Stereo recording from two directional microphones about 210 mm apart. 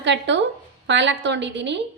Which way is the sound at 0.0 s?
60° right (ahead or behind).